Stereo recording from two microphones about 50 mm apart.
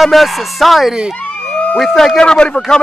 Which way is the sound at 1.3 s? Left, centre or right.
Centre.